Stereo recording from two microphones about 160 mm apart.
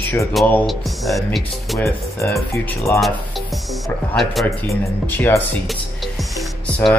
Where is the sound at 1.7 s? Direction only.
20° left (ahead or behind).